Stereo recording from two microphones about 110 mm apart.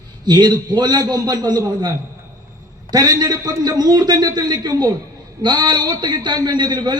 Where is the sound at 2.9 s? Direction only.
35° right (ahead or behind).